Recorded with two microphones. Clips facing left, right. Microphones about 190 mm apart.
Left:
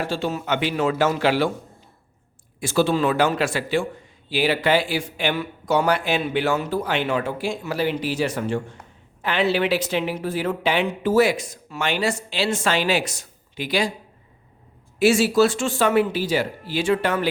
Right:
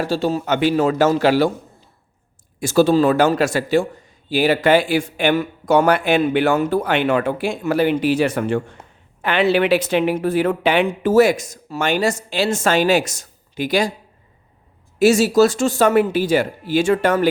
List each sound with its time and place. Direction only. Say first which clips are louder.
0.0 s a man's voice: right 5 dB; 40° right (ahead or behind)
2.6 s a man's voice: right 6 dB; 40° right (ahead or behind)
14.9 s speech: right 4 dB; 40° right (ahead or behind)